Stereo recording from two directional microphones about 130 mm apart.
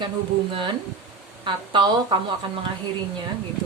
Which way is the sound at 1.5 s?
35° right (ahead or behind).